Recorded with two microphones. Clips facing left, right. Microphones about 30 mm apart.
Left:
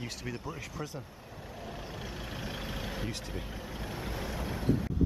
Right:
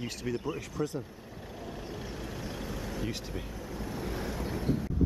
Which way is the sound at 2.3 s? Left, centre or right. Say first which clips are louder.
Left 1 dB; left.